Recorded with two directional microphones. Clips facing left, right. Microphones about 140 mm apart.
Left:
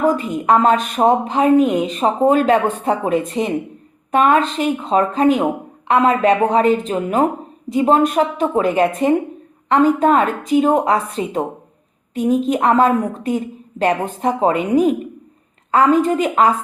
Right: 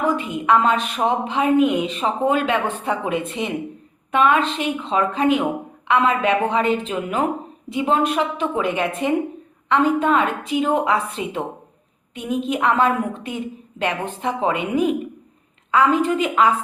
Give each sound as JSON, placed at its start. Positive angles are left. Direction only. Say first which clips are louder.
{"t": 0.0, "sound": "a woman's voice", "louder": "left 4 dB", "side_deg": 40}